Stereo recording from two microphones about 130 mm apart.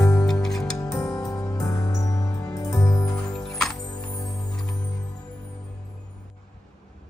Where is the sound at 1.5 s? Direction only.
25° left (ahead or behind).